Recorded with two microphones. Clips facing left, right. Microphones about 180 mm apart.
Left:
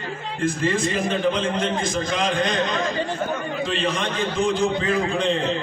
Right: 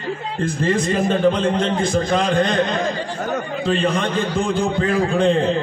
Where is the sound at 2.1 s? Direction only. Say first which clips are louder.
Right 4 dB; 55° right (ahead or behind).